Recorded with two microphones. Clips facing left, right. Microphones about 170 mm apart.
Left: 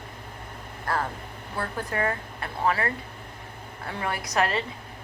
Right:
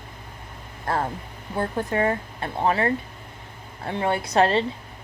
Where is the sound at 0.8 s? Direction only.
25° right (ahead or behind).